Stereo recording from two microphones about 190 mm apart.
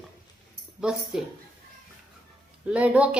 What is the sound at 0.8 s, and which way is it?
Speech, 5° right (ahead or behind).